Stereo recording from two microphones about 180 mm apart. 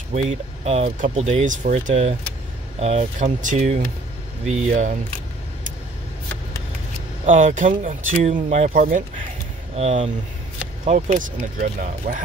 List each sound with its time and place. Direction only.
0.1 s speech: 40° right (ahead or behind)
7.2 s speech: 45° right (ahead or behind)